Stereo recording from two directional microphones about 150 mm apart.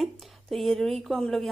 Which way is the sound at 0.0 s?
Centre (ahead or behind).